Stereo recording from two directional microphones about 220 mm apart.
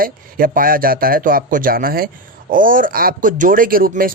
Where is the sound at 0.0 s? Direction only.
40° right (ahead or behind).